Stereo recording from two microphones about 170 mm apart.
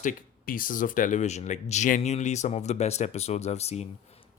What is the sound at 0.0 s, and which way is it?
Speech, 55° left (ahead or behind).